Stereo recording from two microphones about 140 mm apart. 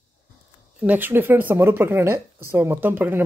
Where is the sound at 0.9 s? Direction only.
15° right (ahead or behind).